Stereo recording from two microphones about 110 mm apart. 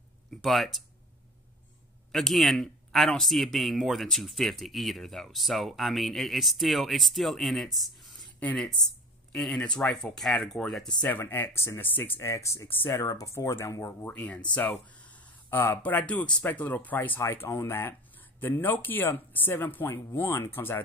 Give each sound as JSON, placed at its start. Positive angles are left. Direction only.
{"t": 0.3, "sound": "speech", "side_deg": 0}
{"t": 2.1, "sound": "speech", "side_deg": 0}
{"t": 8.0, "sound": "a sound", "side_deg": 0}
{"t": 8.4, "sound": "speech", "side_deg": 15}
{"t": 11.0, "sound": "speech", "side_deg": 20}
{"t": 13.0, "sound": "speech", "side_deg": 30}
{"t": 14.1, "sound": "speech", "side_deg": 15}